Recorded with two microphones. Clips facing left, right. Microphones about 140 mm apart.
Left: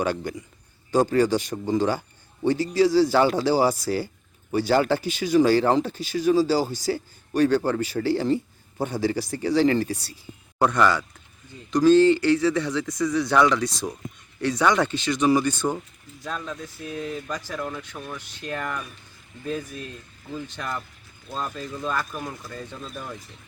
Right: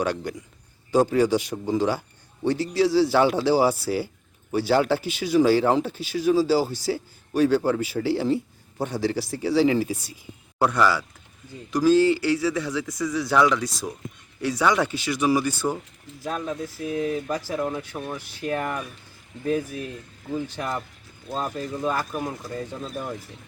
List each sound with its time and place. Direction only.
0.0 s speech: centre (ahead or behind); by 18.0 s 25° right (ahead or behind)
18.3 s speech: 10° right (ahead or behind)
18.6 s speech: 25° right (ahead or behind)
19.5 s speech: 15° right (ahead or behind)